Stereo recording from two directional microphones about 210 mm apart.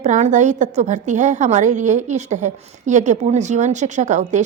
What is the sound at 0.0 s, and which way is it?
A woman's voice, 35° right (ahead or behind).